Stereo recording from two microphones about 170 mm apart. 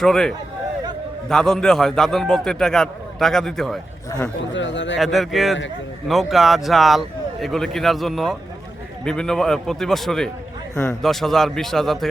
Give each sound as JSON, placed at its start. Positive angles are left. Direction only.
{"t": 0.0, "sound": "a man's voice", "side_deg": 5}
{"t": 4.5, "sound": "speech", "side_deg": 90}
{"t": 4.9, "sound": "a man's voice", "side_deg": 0}